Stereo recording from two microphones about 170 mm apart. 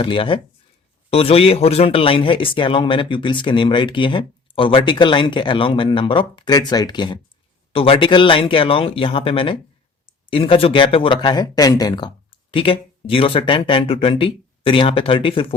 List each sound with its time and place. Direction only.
0.0 s speech: 30° left (ahead or behind)